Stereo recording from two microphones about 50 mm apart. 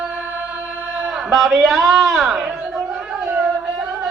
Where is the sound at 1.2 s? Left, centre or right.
Centre.